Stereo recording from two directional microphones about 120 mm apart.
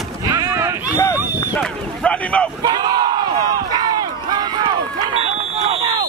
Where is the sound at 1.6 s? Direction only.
10° left (ahead or behind).